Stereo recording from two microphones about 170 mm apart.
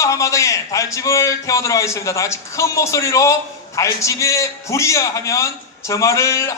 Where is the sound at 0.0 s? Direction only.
20° left (ahead or behind).